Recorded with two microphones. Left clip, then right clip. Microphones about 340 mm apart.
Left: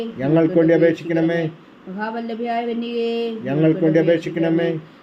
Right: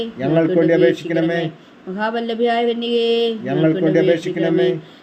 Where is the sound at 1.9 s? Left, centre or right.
Right.